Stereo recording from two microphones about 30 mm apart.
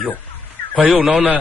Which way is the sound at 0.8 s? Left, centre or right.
Right.